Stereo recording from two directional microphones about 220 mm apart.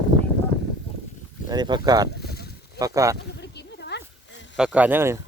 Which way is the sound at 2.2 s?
45° left (ahead or behind).